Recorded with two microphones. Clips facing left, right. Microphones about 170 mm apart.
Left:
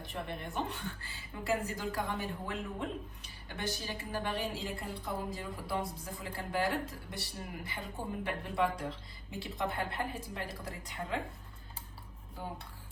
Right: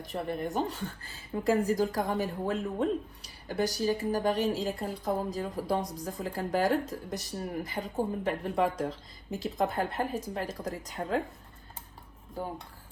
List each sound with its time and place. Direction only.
0.0 s speech: 40° right (ahead or behind)